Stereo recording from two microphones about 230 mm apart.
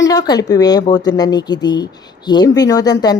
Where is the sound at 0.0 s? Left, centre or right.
Centre.